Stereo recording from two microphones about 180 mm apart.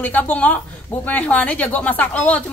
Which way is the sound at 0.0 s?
10° left (ahead or behind).